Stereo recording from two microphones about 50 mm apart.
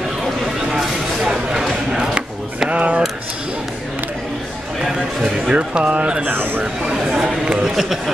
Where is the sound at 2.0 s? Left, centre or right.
Centre.